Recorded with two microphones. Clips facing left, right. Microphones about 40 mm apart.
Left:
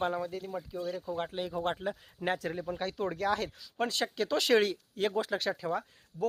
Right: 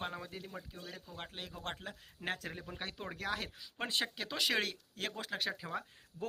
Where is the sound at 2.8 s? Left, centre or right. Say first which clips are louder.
Left 10 dB; centre.